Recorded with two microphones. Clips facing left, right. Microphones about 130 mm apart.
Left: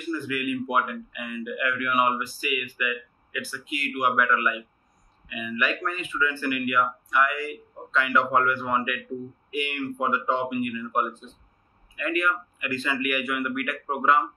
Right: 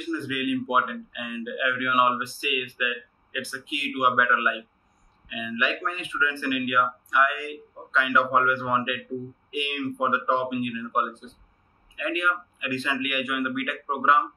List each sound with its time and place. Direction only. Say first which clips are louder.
0.1 s speech: right 1 dB; 10° right (ahead or behind)